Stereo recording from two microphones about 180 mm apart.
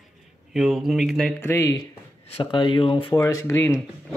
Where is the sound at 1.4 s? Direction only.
15° left (ahead or behind).